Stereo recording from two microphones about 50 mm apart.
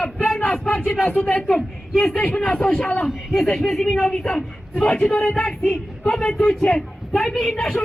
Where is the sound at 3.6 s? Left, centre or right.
Centre.